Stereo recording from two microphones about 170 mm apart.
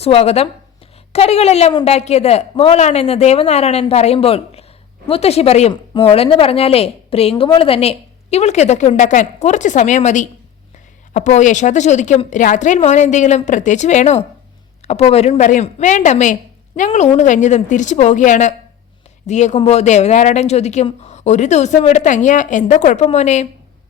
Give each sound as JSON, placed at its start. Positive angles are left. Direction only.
{"t": 0.0, "sound": "a woman's voice", "side_deg": 35}